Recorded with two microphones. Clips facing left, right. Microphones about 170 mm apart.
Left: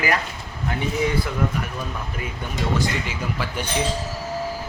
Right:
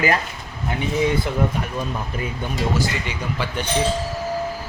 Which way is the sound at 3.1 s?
Centre (ahead or behind).